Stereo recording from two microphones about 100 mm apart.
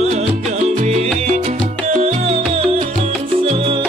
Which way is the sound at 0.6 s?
90° right.